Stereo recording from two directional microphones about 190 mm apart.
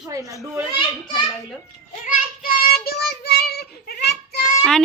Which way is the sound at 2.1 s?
50° left (ahead or behind).